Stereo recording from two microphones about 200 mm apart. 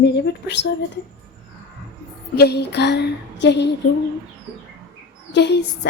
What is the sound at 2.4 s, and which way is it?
A woman's voice, 55° left (ahead or behind).